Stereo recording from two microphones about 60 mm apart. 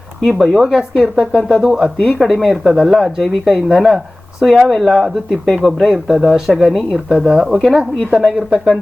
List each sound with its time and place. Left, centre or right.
0.3 s speech: centre
8.4 s speech: centre